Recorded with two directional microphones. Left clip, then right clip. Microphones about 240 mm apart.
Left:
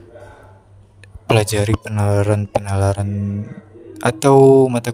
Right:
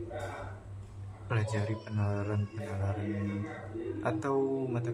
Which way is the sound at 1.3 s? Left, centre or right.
Left.